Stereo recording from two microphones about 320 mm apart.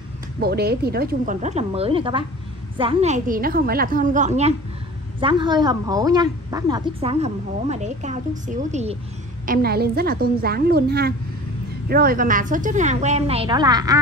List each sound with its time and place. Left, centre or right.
0.4 s a woman's voice: right; by 13.9 s centre